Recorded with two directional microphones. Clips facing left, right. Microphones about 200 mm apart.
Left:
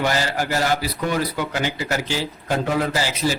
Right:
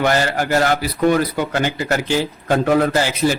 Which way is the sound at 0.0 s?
55° right (ahead or behind).